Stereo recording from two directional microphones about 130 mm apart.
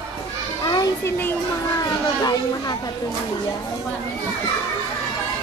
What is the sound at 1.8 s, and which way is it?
Children playing, 30° left (ahead or behind).